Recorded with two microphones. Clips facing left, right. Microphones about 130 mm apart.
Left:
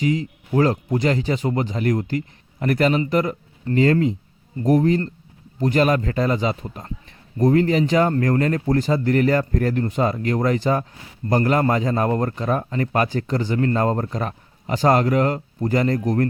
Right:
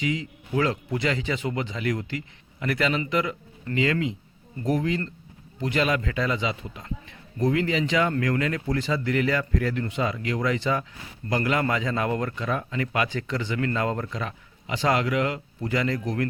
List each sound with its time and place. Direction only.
0.0 s a man's voice: 40° left (ahead or behind)